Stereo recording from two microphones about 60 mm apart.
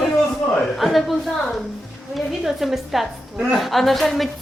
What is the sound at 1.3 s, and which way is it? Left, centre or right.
Speech, centre.